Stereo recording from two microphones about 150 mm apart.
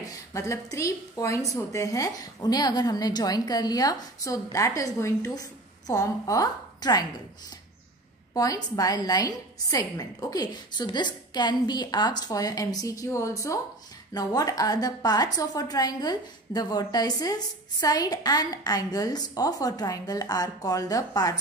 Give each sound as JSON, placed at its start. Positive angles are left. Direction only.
{"t": 0.0, "sound": "a woman's voice", "side_deg": 20}
{"t": 8.4, "sound": "a woman's voice", "side_deg": 25}